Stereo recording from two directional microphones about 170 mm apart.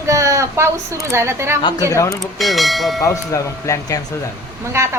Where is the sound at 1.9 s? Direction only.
15° left (ahead or behind).